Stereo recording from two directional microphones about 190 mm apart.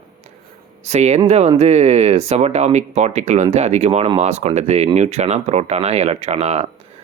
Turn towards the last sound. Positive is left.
turn(degrees=-35)  # may be behind; listen again after turning